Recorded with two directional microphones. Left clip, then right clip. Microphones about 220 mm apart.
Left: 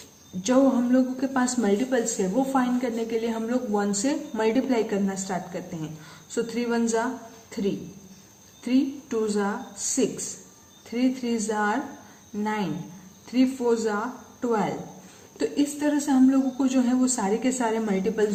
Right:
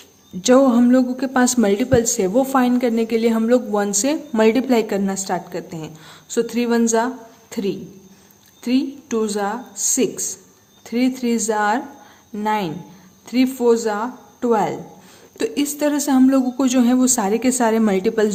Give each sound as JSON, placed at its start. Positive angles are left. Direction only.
{"t": 0.4, "sound": "a woman's voice", "side_deg": -50}
{"t": 8.6, "sound": "a woman's voice", "side_deg": -45}